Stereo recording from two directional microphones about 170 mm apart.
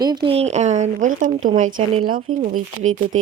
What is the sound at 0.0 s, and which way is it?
Speech, 25° right (ahead or behind).